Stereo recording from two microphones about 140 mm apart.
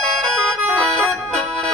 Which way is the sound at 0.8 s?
5° left (ahead or behind).